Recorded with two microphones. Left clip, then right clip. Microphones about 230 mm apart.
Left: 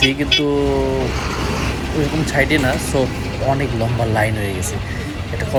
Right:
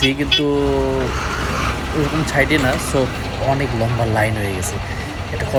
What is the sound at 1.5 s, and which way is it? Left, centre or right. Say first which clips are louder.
Vehicle: right 1 dB; centre.